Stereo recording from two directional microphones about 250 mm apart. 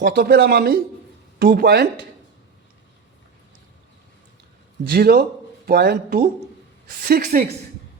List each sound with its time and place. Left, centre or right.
0.0 s speech: right
4.8 s speech: right